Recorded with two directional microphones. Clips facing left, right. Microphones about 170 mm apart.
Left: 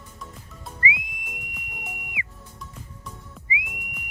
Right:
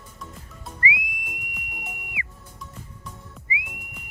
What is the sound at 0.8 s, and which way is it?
Whistle, 25° left (ahead or behind).